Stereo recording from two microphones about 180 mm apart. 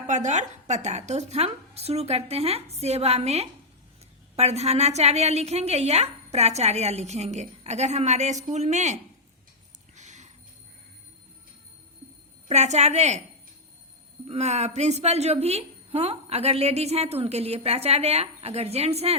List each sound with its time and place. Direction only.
0.1 s a woman's voice: 40° right (ahead or behind)
9.9 s a sound: 40° right (ahead or behind)
12.5 s a woman's voice: 40° right (ahead or behind)
14.3 s a woman's voice: 35° right (ahead or behind)